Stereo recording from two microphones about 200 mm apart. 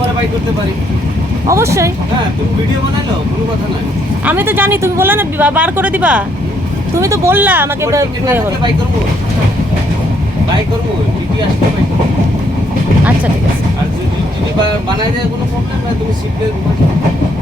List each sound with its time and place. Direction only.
1.5 s speech: 15° right (ahead or behind)
4.3 s speech: 10° right (ahead or behind)